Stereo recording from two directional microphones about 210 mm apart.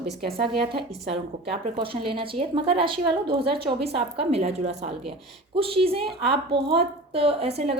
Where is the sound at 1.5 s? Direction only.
25° right (ahead or behind).